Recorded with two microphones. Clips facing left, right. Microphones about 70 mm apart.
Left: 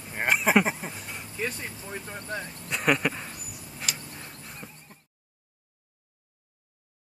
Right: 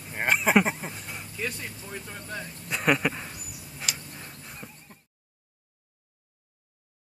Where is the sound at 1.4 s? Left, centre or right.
Left.